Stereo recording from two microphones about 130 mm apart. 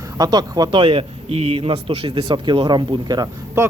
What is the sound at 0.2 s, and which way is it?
Speech, 30° right (ahead or behind).